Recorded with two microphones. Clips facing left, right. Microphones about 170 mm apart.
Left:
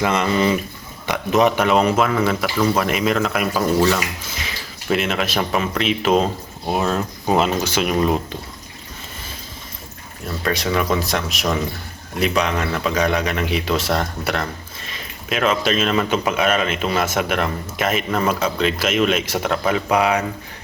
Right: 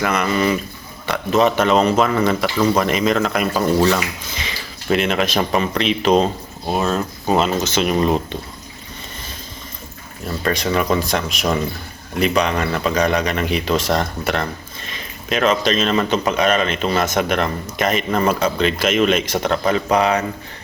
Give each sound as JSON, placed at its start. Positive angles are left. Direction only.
{"t": 0.0, "sound": "speech", "side_deg": 25}
{"t": 10.4, "sound": "speech", "side_deg": 0}